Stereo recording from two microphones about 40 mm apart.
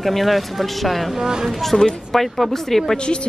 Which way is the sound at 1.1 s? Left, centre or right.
Centre.